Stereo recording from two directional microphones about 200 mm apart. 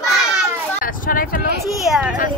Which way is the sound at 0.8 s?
45° left (ahead or behind).